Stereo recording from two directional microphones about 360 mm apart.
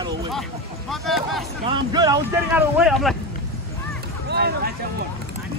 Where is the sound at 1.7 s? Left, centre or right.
Centre.